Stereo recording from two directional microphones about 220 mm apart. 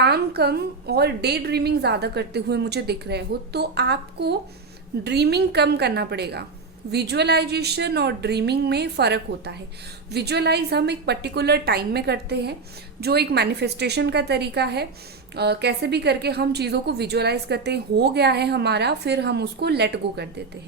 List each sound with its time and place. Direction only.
0.0 s a woman's voice: 50° right (ahead or behind)